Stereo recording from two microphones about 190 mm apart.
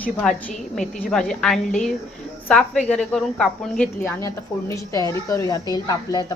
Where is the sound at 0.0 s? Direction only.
5° left (ahead or behind).